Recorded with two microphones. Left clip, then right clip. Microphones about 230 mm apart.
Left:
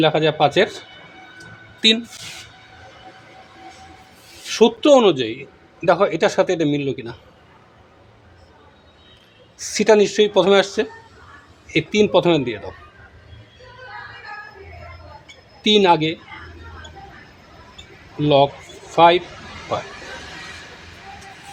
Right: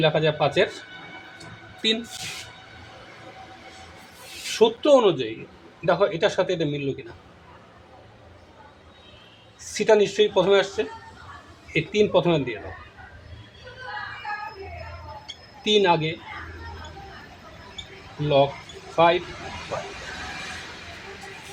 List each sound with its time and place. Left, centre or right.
0.0 s speech: left
1.8 s speech: left
4.5 s speech: left
9.6 s speech: left
15.6 s speech: left
18.2 s speech: left